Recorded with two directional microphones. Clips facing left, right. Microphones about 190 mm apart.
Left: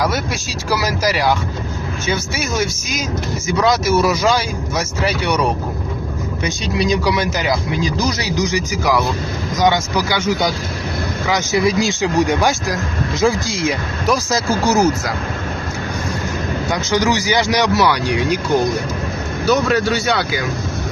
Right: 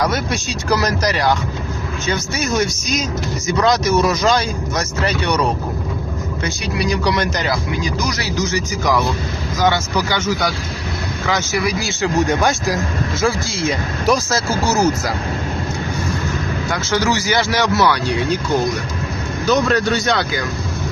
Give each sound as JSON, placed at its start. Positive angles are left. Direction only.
{"t": 0.0, "sound": "speech", "side_deg": 5}
{"t": 6.7, "sound": "speech", "side_deg": 20}
{"t": 7.0, "sound": "speech", "side_deg": 10}
{"t": 16.7, "sound": "speech", "side_deg": 15}
{"t": 19.5, "sound": "speech", "side_deg": 5}